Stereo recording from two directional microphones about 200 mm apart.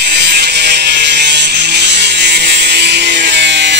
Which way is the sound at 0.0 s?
55° right (ahead or behind).